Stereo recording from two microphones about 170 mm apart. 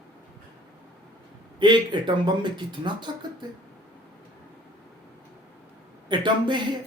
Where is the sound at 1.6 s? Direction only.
25° right (ahead or behind).